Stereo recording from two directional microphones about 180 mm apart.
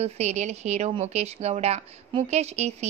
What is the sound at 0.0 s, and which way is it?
Speech, 40° right (ahead or behind).